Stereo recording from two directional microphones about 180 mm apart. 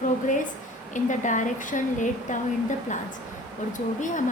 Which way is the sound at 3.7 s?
45° left (ahead or behind).